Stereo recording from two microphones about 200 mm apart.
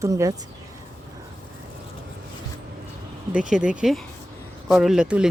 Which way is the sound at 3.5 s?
5° right (ahead or behind).